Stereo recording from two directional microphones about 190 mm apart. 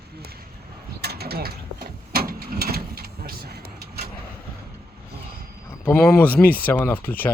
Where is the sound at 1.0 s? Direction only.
55° right (ahead or behind).